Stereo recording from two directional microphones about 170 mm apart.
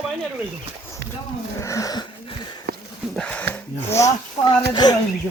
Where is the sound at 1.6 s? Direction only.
20° left (ahead or behind).